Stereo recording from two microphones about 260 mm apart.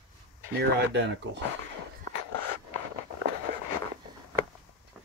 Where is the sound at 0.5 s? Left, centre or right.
Right.